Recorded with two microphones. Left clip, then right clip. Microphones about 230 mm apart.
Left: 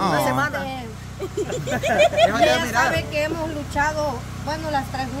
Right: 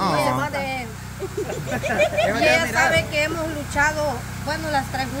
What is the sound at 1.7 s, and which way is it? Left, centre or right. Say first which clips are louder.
Speech: left 3 dB; left.